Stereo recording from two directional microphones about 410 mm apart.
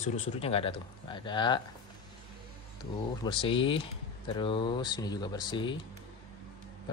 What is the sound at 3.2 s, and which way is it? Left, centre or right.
Speech, centre.